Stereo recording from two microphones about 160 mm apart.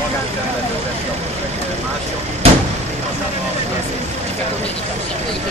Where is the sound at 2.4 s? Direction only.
35° right (ahead or behind).